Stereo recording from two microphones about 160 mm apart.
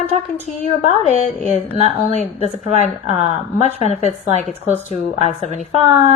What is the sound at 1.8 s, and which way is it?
A woman's voice, 45° left (ahead or behind).